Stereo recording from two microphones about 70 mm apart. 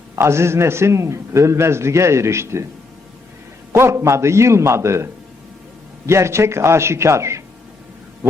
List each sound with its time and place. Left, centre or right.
0.2 s a man's voice: right
3.7 s a man's voice: right
6.1 s a man's voice: right
8.2 s a sound: right